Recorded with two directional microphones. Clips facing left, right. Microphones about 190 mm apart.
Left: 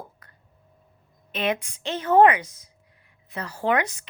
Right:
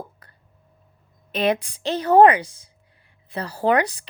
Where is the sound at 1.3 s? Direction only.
35° right (ahead or behind).